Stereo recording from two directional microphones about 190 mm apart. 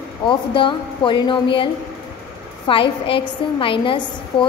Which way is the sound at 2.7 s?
30° left (ahead or behind).